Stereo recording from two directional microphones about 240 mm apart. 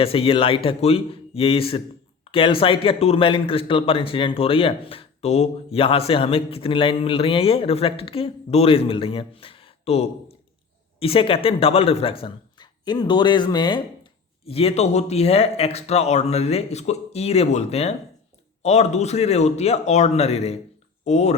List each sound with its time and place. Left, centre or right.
0.0 s speech: left